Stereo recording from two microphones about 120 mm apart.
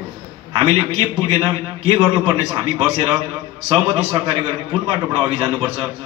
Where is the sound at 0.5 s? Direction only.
50° right (ahead or behind).